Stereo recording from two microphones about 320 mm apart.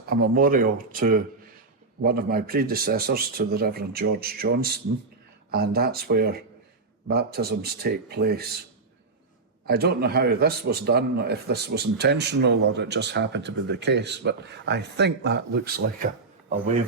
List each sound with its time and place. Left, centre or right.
0.1 s a man's voice: right
9.6 s a man's voice: right